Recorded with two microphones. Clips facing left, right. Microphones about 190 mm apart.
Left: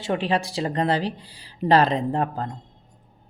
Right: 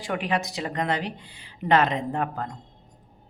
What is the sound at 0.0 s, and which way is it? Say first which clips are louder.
Speech: left 3 dB; 30° left (ahead or behind).